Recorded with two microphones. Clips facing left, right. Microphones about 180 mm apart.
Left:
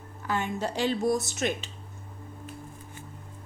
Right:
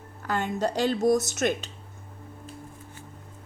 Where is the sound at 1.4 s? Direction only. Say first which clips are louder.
Right 3 dB; 40° right (ahead or behind).